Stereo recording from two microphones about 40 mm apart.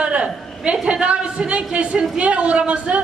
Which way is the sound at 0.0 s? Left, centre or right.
Right.